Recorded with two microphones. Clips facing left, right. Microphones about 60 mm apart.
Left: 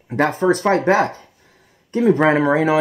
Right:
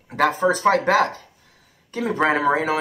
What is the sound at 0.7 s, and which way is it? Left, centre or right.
Speech, left.